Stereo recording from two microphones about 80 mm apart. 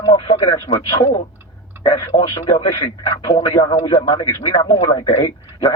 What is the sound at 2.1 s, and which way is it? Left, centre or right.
Speech, left.